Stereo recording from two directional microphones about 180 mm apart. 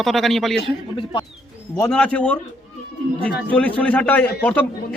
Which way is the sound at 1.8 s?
5° left (ahead or behind).